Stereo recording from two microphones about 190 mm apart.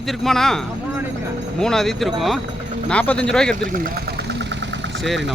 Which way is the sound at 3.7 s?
55° right (ahead or behind).